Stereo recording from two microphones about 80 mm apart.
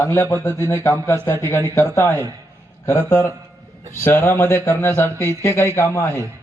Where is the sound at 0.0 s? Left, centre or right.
Left.